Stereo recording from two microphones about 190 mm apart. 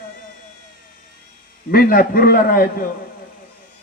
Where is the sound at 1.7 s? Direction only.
50° left (ahead or behind).